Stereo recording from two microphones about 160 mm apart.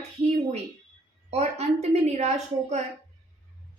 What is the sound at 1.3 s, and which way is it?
A woman's voice, 40° right (ahead or behind).